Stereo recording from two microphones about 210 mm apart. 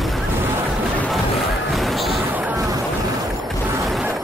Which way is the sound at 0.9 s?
5° left (ahead or behind).